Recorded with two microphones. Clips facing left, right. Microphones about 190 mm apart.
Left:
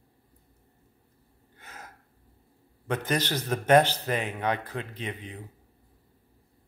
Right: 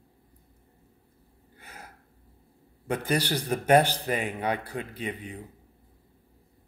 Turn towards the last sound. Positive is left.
turn(degrees=-10)  # may be behind; listen again after turning